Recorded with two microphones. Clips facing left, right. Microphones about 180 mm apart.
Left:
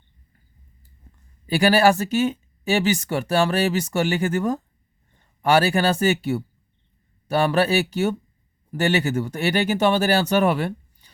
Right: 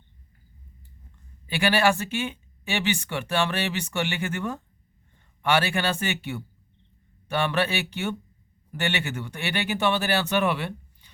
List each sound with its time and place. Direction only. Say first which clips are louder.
1.5 s speech: left 6 dB; 40° left (ahead or behind)